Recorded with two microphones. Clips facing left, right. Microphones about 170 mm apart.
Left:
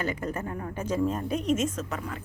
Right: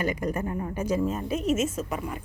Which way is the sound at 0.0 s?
15° right (ahead or behind).